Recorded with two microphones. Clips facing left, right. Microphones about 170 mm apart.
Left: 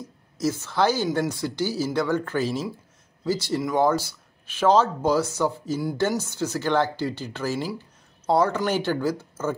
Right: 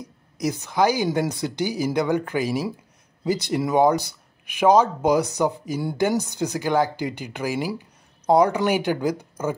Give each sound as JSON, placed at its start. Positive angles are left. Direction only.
{"t": 0.0, "sound": "speech", "side_deg": -15}